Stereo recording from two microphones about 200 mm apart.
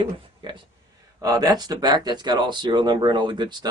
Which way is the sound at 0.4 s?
25° right (ahead or behind).